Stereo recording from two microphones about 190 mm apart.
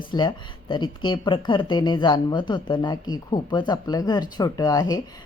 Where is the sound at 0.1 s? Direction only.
25° left (ahead or behind).